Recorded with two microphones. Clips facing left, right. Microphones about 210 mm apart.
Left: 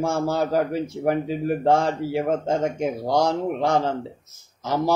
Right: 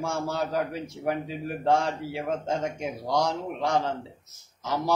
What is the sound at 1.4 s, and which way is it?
A man's voice, 45° left (ahead or behind).